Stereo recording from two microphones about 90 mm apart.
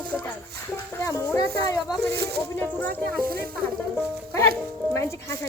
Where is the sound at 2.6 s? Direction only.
20° left (ahead or behind).